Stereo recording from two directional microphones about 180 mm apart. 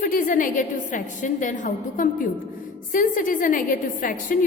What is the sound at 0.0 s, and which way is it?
A woman's voice, 50° left (ahead or behind).